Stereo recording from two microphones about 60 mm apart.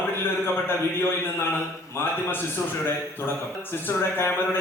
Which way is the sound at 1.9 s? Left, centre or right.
Left.